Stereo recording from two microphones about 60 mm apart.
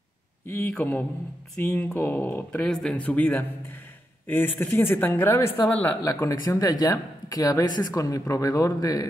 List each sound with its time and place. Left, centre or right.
0.5 s speech: left
1.6 s speech: left
2.0 s speech: left
2.6 s speech: centre
4.3 s speech: left
6.2 s speech: left